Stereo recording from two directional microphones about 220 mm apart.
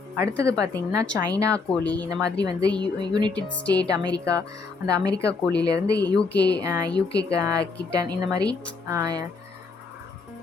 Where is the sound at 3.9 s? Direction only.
15° right (ahead or behind).